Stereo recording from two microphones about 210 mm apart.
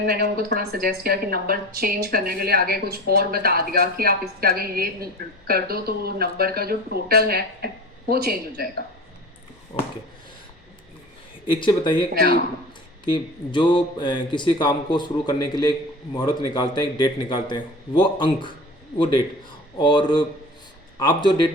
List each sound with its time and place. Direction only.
0.0 s a woman's voice: 50° right (ahead or behind)
9.7 s speech: 30° left (ahead or behind)
11.4 s speech: 20° left (ahead or behind)
12.1 s a woman's voice: 45° right (ahead or behind)
13.1 s speech: 20° left (ahead or behind)
19.8 s speech: 20° left (ahead or behind)